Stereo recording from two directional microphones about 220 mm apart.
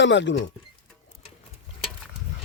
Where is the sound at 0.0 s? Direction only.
55° left (ahead or behind).